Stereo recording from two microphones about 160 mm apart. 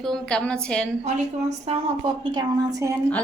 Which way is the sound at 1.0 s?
45° right (ahead or behind).